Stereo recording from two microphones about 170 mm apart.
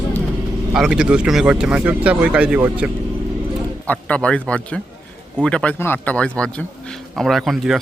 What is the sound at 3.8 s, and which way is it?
A man's voice, 10° left (ahead or behind).